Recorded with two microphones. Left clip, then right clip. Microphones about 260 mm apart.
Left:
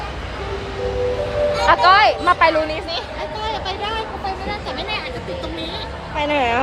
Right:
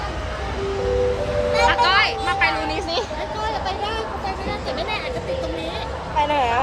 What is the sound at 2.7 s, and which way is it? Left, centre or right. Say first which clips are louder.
Speech: right 1 dB; right.